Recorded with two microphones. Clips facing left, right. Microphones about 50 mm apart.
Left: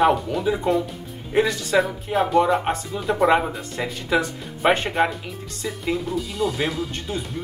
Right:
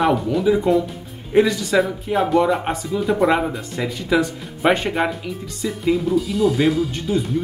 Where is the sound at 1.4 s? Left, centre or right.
Centre.